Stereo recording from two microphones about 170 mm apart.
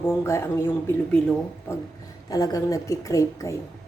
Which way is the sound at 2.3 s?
20° left (ahead or behind).